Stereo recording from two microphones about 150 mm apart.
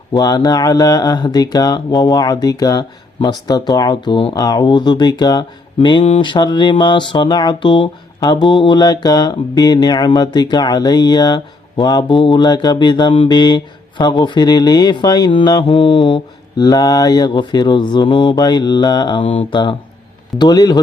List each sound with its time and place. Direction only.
0.1 s speech: 25° left (ahead or behind)